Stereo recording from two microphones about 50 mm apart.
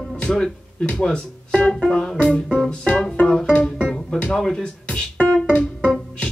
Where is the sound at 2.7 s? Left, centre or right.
Left.